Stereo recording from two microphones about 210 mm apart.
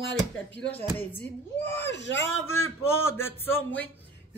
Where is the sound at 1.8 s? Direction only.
55° left (ahead or behind).